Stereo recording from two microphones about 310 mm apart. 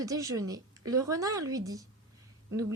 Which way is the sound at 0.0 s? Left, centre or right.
Centre.